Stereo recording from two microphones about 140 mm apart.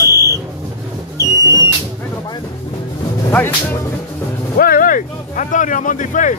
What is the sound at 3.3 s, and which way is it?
Speech, 15° left (ahead or behind).